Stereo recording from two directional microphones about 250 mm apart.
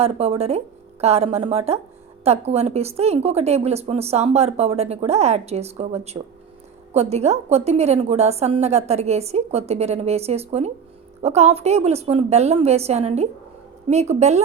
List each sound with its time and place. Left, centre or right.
0.0 s a woman's voice: right